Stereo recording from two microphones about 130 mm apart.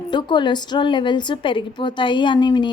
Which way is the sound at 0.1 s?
35° left (ahead or behind).